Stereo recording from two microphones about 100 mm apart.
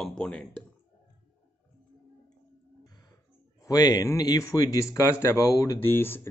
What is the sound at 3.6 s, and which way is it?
Speech, 40° left (ahead or behind).